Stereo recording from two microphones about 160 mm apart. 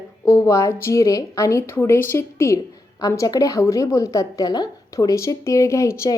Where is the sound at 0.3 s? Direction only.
20° left (ahead or behind).